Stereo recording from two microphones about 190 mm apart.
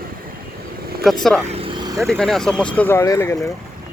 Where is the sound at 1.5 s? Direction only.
25° right (ahead or behind).